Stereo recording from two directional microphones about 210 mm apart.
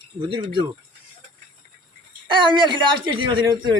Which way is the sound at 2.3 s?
25° right (ahead or behind).